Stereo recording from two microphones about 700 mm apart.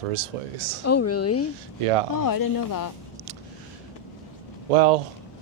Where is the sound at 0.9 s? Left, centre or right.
Centre.